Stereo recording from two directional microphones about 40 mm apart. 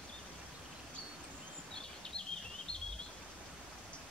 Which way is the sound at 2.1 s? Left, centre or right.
Centre.